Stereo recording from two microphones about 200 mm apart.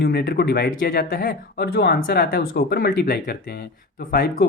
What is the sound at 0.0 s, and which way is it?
Speech, 50° left (ahead or behind).